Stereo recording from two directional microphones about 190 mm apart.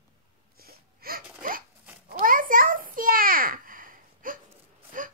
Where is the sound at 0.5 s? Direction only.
50° right (ahead or behind).